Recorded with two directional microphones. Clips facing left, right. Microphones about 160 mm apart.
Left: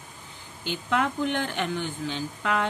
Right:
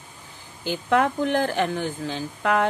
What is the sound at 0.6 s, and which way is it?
A woman's voice, 40° right (ahead or behind).